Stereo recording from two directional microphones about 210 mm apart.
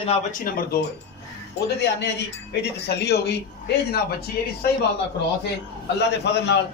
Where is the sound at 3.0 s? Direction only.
50° left (ahead or behind).